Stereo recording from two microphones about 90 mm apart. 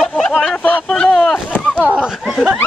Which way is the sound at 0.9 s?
5° left (ahead or behind).